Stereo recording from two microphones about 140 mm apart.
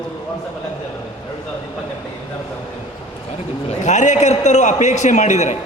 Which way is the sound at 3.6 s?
55° left (ahead or behind).